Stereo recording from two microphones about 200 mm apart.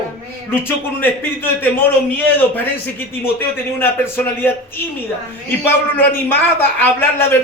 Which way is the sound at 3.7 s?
10° left (ahead or behind).